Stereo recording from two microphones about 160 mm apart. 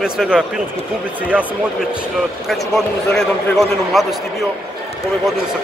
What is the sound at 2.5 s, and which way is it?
A man's voice, centre (ahead or behind).